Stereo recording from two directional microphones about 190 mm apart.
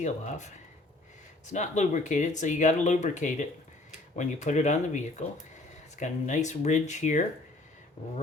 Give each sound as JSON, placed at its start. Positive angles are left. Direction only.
{"t": 0.0, "sound": "speech", "side_deg": 40}